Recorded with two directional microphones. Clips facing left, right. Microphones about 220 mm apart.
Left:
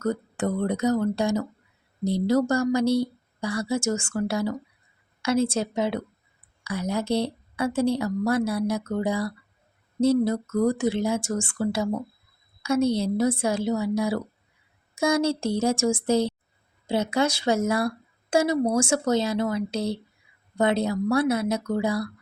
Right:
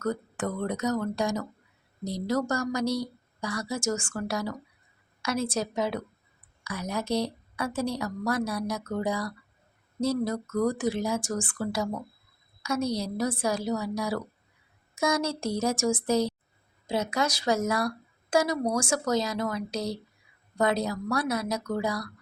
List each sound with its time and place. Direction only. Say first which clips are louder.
0.0 s speech: left 4 dB; 25° left (ahead or behind)